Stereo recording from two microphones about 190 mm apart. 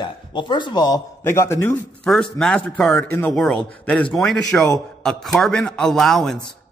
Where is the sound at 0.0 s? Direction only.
25° left (ahead or behind).